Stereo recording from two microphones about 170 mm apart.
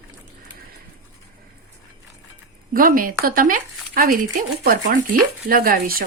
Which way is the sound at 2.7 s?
55° right (ahead or behind).